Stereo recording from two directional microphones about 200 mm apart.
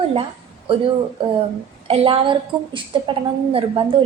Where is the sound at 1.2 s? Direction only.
25° right (ahead or behind).